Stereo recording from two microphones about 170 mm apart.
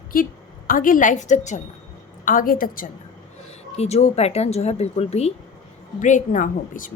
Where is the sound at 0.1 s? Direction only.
55° left (ahead or behind).